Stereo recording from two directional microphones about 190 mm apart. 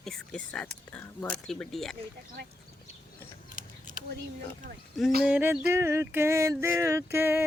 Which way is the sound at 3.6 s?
45° right (ahead or behind).